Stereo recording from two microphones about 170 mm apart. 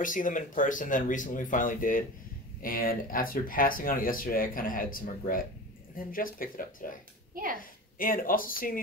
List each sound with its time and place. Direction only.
0.0 s speech: 50° left (ahead or behind)
7.3 s a woman's voice: 55° right (ahead or behind)
8.0 s speech: 55° left (ahead or behind)